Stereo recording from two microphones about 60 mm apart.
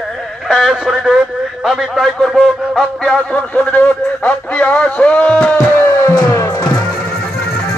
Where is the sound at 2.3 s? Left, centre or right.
Centre; by 5.5 s left.